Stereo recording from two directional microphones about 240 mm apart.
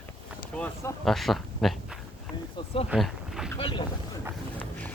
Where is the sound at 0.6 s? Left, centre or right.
Centre.